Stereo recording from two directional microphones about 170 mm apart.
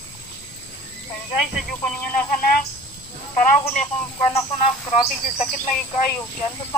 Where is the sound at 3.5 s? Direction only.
10° left (ahead or behind).